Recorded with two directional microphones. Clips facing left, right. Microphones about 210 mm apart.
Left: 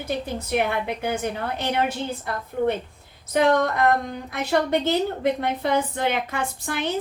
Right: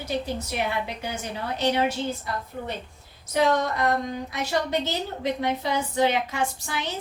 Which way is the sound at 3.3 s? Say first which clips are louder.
Left 3 dB; 55° left (ahead or behind).